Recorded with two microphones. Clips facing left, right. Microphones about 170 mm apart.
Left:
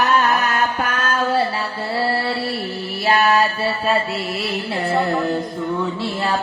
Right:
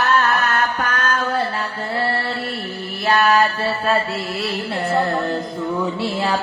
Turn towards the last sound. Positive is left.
turn(degrees=0)  # may be behind; listen again after turning